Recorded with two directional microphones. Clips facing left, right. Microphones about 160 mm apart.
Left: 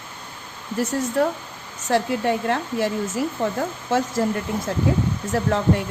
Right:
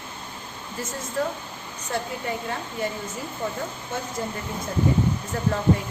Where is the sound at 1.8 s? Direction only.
80° left.